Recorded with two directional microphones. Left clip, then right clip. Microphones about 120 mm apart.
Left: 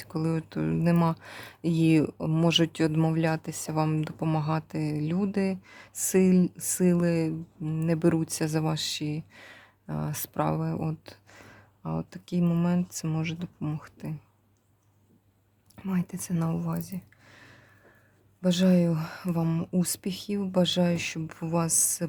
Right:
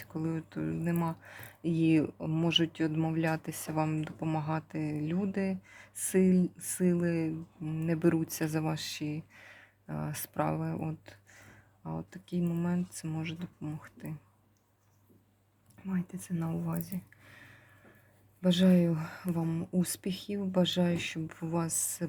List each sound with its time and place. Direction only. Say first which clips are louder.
0.0 s speech: left 6 dB; 45° left (ahead or behind)
15.9 s speech: left 6 dB; 50° left (ahead or behind)
16.6 s a sound: left 3 dB; 15° left (ahead or behind)
18.4 s speech: left 3 dB; 20° left (ahead or behind)